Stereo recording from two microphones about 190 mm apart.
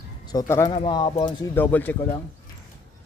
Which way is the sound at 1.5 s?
10° left (ahead or behind).